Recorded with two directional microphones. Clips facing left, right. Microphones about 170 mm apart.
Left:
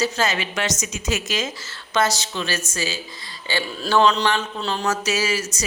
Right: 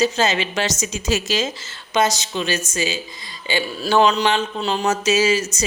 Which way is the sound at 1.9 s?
20° right (ahead or behind).